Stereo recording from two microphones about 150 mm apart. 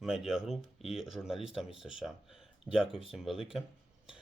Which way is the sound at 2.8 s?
35° left (ahead or behind).